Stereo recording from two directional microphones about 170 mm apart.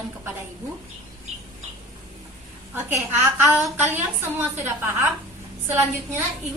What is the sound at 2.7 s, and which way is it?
A woman's voice, 10° right (ahead or behind).